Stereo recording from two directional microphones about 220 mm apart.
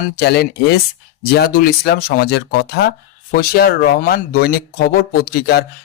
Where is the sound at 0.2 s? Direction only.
45° left (ahead or behind).